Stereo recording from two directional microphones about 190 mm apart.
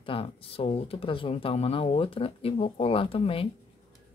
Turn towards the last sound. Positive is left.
turn(degrees=30)  # may be behind; listen again after turning